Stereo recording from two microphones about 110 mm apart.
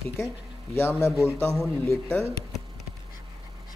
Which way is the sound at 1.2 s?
25° left (ahead or behind).